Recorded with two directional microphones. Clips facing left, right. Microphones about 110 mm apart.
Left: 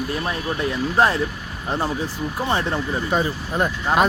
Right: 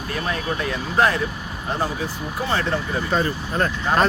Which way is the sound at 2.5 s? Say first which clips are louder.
Even; 15° left (ahead or behind).